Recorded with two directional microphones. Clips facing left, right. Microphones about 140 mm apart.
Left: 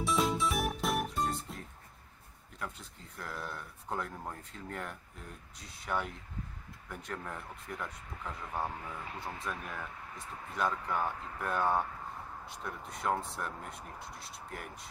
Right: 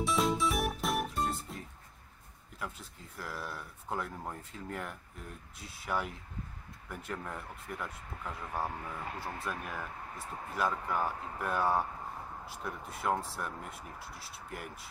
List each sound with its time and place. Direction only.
0.0 s music: centre (ahead or behind)
2.6 s speech: 5° right (ahead or behind)